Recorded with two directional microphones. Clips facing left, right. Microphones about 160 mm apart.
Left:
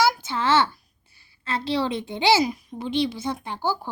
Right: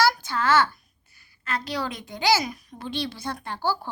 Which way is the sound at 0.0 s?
25° left (ahead or behind).